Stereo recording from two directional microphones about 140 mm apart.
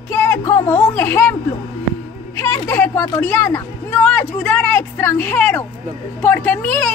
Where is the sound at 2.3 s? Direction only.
15° left (ahead or behind).